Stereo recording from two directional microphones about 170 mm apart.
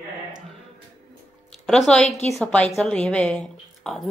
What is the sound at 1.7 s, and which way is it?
Speech, 5° left (ahead or behind).